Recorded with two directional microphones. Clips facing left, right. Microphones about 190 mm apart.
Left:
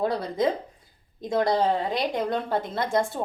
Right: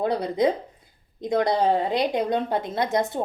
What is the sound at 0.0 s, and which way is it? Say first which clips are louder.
A woman's voice: right 2 dB; 20° right (ahead or behind).